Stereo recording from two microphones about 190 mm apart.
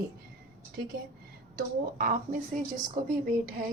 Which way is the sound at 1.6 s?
45° right (ahead or behind).